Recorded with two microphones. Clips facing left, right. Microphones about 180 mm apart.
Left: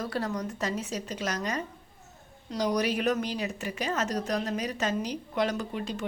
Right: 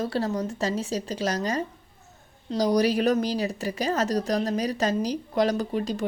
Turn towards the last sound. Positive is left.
turn(degrees=-40)  # may be behind; listen again after turning